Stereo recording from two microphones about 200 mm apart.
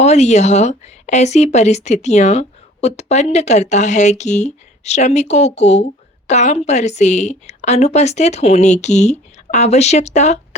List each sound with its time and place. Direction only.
0.0 s speech: 35° left (ahead or behind)